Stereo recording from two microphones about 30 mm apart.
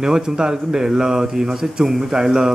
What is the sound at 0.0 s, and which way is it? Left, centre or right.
Speech, right.